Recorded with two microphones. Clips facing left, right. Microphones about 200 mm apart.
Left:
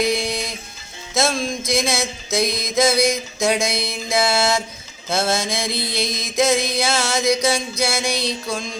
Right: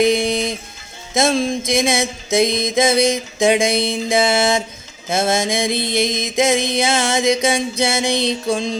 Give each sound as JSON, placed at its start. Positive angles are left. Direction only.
{"t": 0.0, "sound": "music", "side_deg": -25}
{"t": 5.0, "sound": "mantra", "side_deg": -20}
{"t": 5.5, "sound": "music", "side_deg": -20}